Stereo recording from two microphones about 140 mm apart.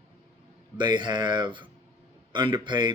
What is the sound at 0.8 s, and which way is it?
Speech, 35° right (ahead or behind).